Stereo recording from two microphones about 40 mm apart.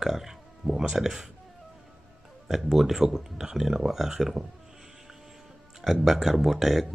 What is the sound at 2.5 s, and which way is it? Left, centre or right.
Speech, centre.